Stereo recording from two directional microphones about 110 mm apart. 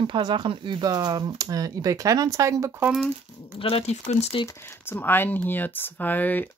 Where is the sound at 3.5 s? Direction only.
60° left (ahead or behind); by 4.3 s 85° left.